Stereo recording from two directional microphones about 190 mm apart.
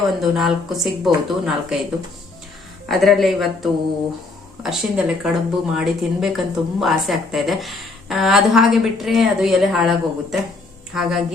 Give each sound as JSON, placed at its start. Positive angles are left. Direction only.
{"t": 0.2, "sound": "speech", "side_deg": 0}
{"t": 2.9, "sound": "speech", "side_deg": 0}